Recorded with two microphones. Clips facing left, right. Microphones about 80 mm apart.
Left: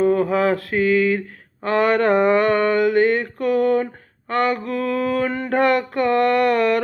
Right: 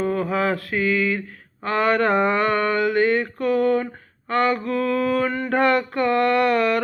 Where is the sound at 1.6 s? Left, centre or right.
Centre.